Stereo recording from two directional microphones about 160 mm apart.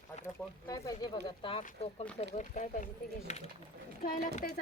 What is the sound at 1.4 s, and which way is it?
Speech, 35° left (ahead or behind).